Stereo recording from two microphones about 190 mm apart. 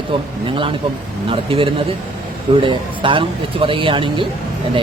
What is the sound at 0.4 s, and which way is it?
A man's voice, 25° right (ahead or behind).